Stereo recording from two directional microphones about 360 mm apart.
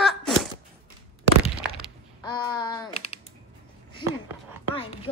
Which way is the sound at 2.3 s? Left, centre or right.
Centre.